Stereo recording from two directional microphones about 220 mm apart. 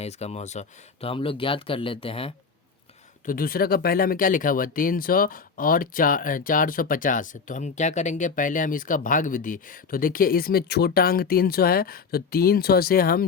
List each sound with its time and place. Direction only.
0.0 s speech: 30° left (ahead or behind)
3.2 s speech: 40° left (ahead or behind)